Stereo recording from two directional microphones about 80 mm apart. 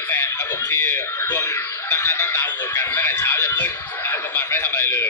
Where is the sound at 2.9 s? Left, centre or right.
Left.